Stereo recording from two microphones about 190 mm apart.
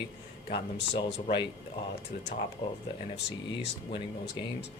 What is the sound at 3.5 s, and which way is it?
Speech, 25° left (ahead or behind).